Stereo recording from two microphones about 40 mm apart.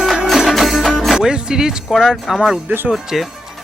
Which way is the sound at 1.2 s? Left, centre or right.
Centre.